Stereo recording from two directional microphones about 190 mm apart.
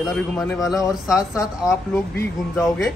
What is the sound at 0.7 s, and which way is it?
A woman's voice, 15° left (ahead or behind).